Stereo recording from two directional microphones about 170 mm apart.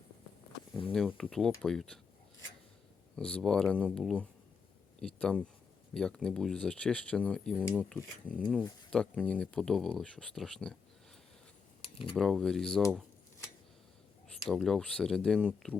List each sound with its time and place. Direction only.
0.9 s speech: 10° left (ahead or behind)
3.2 s speech: 5° left (ahead or behind)
11.8 s a sound: 30° left (ahead or behind)
12.1 s speech: centre (ahead or behind)
14.4 s speech: centre (ahead or behind)